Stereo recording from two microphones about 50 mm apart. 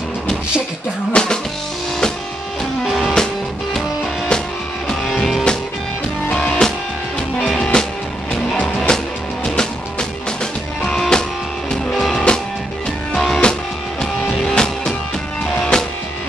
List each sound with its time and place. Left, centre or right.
1.1 s music: centre
2.8 s music: centre
6.4 s music: centre
7.3 s music: centre